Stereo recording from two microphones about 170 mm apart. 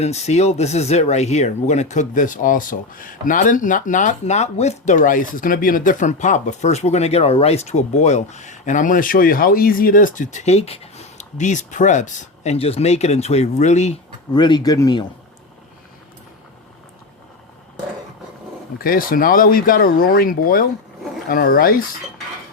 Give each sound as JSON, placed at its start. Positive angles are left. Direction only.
{"t": 0.0, "sound": "speech", "side_deg": 40}
{"t": 14.3, "sound": "speech", "side_deg": 25}
{"t": 18.8, "sound": "speech", "side_deg": 55}